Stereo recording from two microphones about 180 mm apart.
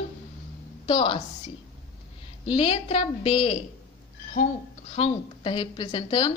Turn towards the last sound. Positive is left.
turn(degrees=25)  # may be behind; listen again after turning